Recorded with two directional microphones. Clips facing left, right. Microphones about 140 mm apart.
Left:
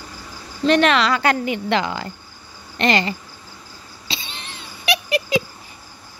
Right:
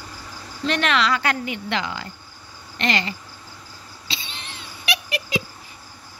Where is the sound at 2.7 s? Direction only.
40° left (ahead or behind).